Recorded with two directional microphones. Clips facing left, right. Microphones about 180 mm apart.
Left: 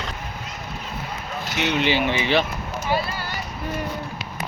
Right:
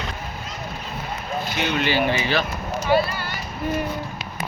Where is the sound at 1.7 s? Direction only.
20° left (ahead or behind).